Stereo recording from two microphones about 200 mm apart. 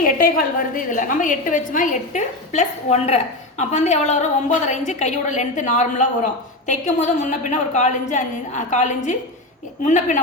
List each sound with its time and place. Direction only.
0.0 s a woman's voice: 45° left (ahead or behind)